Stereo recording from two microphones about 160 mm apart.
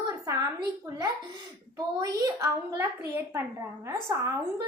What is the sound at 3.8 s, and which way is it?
Speech, 15° right (ahead or behind).